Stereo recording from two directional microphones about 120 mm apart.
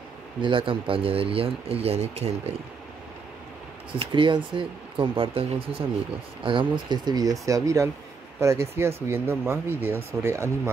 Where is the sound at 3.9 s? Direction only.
45° right (ahead or behind).